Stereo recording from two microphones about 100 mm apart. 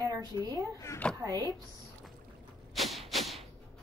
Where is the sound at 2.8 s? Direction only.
Centre (ahead or behind).